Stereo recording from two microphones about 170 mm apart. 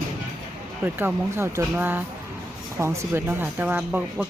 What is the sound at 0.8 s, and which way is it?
Speech, 15° right (ahead or behind).